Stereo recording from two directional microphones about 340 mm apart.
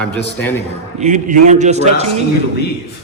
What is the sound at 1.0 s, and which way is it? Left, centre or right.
A man's voice, right.